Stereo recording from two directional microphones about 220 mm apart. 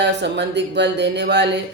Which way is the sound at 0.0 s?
50° right (ahead or behind).